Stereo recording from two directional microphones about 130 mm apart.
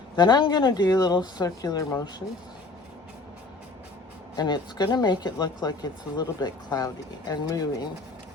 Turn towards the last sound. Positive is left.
turn(degrees=30)  # may be behind; listen again after turning